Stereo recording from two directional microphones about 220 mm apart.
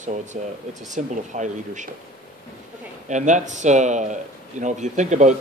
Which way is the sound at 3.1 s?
35° right (ahead or behind).